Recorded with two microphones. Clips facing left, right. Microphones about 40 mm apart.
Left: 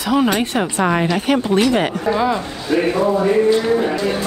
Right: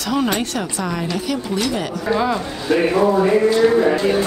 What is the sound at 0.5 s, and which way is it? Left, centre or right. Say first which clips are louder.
A woman's voice: left 6 dB; left.